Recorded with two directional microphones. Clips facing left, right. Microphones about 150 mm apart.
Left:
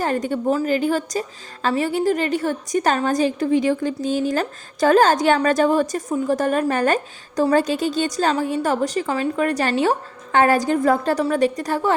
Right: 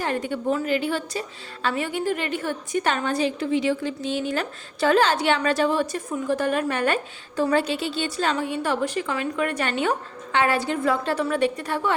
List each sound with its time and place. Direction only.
0.0 s a woman's voice: 40° left (ahead or behind)